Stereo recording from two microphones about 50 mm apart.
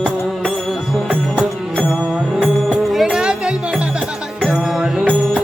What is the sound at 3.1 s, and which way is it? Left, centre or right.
Music, centre.